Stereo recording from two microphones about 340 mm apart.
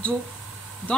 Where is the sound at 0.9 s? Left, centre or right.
Centre.